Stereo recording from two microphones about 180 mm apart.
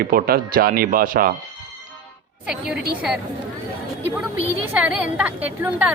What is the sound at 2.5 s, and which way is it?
Speech, 5° right (ahead or behind).